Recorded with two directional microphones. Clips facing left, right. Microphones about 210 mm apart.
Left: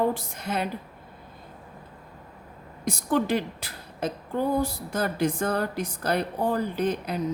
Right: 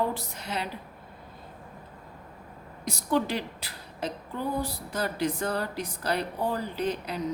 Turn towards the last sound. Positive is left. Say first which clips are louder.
# left 3 dB
turn(degrees=50)  # may be behind; listen again after turning